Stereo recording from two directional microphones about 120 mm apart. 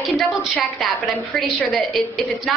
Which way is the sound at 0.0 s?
Centre (ahead or behind).